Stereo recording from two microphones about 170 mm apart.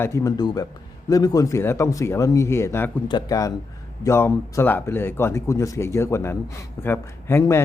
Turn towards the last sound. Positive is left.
turn(degrees=15)  # may be behind; listen again after turning